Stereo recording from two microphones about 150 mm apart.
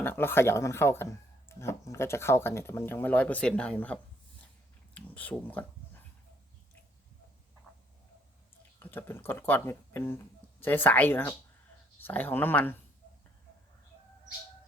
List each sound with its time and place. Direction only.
0.0 s speech: 15° left (ahead or behind)
4.9 s speech: 10° left (ahead or behind)
8.8 s speech: 15° left (ahead or behind)